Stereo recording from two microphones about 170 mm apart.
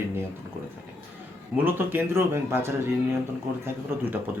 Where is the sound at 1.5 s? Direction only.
10° right (ahead or behind).